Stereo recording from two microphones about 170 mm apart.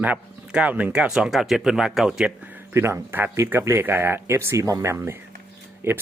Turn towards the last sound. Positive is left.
turn(degrees=-15)  # may be behind; listen again after turning